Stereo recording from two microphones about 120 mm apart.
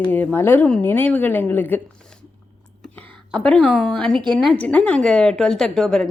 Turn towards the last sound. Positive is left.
turn(degrees=5)  # may be behind; listen again after turning